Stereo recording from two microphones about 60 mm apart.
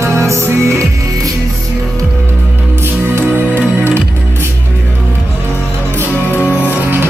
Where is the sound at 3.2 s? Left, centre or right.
Right.